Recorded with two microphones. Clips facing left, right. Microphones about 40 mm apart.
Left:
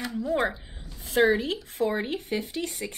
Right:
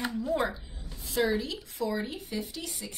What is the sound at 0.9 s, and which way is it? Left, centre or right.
Speech, left.